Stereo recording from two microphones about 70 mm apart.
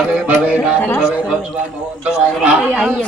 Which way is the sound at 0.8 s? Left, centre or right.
Left.